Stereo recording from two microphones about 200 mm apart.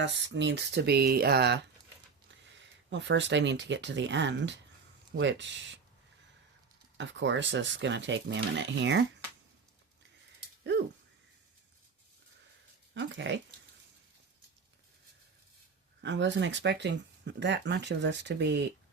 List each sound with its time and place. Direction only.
0.0 s speech: 60° right (ahead or behind)
6.9 s speech: 65° right (ahead or behind)
10.4 s a sound: 60° right (ahead or behind)
12.9 s speech: 65° right (ahead or behind)
16.0 s speech: 65° right (ahead or behind)